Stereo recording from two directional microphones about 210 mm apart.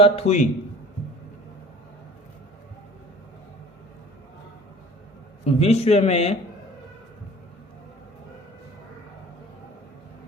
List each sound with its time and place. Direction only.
0.0 s a man's voice: 30° left (ahead or behind)
5.5 s a man's voice: 30° left (ahead or behind)